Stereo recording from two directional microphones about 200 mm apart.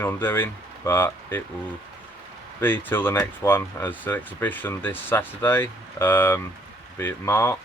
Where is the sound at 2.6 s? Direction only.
10° left (ahead or behind).